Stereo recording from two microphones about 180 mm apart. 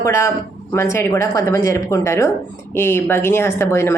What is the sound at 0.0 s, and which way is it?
A woman's voice, 15° left (ahead or behind).